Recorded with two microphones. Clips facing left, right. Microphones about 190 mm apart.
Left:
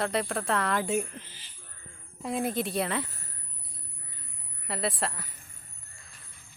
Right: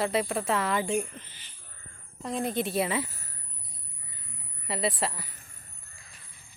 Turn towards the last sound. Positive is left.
turn(degrees=0)  # may be behind; listen again after turning